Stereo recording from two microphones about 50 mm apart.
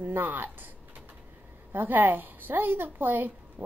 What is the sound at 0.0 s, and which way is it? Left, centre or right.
Speech, right.